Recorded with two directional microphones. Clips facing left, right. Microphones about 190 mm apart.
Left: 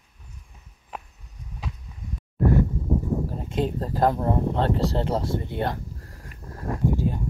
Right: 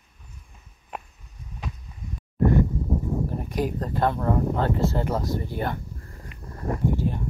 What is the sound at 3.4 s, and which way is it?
Speech, 25° left (ahead or behind).